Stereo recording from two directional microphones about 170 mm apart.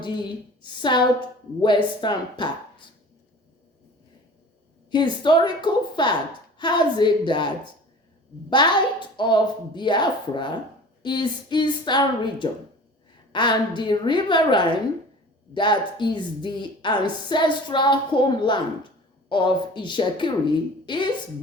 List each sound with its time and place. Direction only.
0.0 s a woman's voice: 25° left (ahead or behind)
4.9 s a woman's voice: 25° left (ahead or behind)